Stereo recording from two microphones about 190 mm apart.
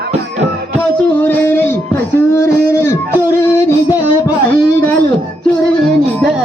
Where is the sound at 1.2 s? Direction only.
10° left (ahead or behind).